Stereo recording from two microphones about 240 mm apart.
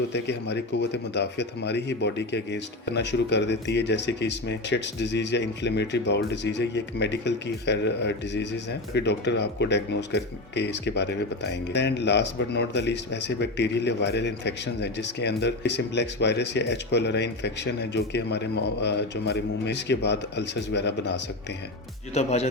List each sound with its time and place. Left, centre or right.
0.1 s speech: left
22.1 s speech: left